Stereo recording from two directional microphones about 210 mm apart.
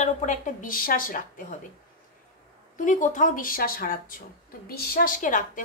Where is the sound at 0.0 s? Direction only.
35° left (ahead or behind).